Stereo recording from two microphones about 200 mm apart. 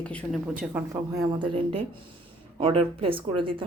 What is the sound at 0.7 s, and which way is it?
A woman's voice, 15° right (ahead or behind).